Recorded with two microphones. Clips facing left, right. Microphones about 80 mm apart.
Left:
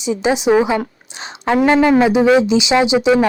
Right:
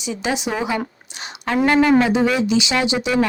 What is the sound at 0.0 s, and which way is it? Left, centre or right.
Speech, left.